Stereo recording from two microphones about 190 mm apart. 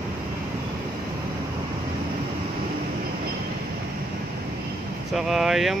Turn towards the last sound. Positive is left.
turn(degrees=0)  # may be behind; listen again after turning